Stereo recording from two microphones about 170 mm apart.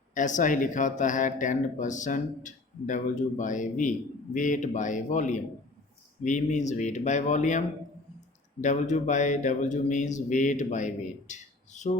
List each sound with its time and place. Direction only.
0.1 s speech: 50° left (ahead or behind)
8.6 s speech: 45° left (ahead or behind)